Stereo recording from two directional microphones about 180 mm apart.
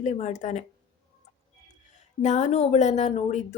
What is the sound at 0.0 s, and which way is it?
Speech, 40° left (ahead or behind).